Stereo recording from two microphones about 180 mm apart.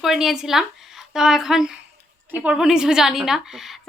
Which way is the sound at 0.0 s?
Centre (ahead or behind).